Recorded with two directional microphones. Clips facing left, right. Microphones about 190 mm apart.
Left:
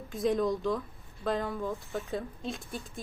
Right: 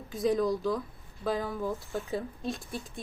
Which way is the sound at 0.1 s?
Centre (ahead or behind).